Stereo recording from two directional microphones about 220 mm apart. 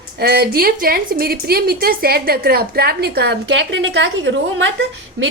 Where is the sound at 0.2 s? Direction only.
45° right (ahead or behind).